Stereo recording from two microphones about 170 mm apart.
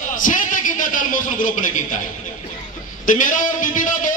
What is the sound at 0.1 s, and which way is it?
A man's voice, 50° left (ahead or behind).